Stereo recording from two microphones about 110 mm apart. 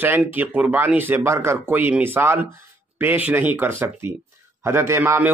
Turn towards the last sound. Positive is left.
turn(degrees=-20)  # may be behind; listen again after turning